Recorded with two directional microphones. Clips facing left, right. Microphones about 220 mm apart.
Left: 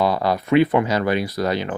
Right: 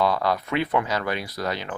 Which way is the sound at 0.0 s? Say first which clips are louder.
Left 3 dB; 5° left (ahead or behind).